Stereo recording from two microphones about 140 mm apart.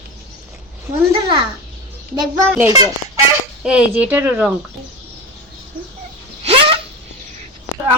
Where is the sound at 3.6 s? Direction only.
10° right (ahead or behind).